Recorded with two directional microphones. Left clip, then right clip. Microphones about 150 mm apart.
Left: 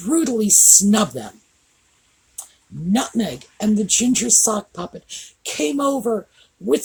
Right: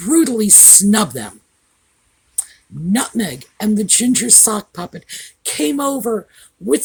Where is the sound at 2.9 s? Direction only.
60° right (ahead or behind).